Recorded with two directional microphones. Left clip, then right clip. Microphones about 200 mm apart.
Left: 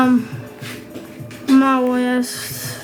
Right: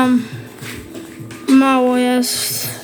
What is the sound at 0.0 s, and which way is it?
Music, 15° left (ahead or behind).